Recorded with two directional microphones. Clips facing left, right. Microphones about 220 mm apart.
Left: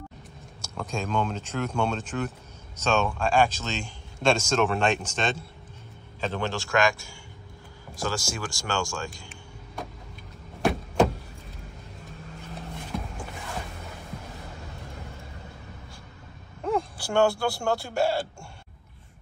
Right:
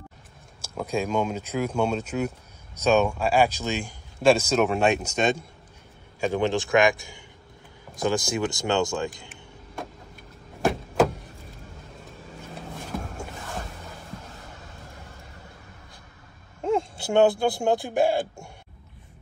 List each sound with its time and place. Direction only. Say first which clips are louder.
0.9 s a man's voice: right 3 dB; 10° right (ahead or behind)
10.6 s a sound: right 1 dB; centre (ahead or behind)
16.6 s speech: right 3 dB; 25° right (ahead or behind)